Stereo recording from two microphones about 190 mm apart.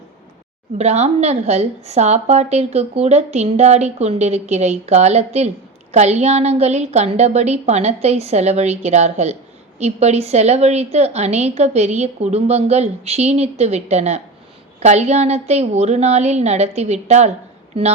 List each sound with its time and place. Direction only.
0.8 s a woman's voice: 35° right (ahead or behind)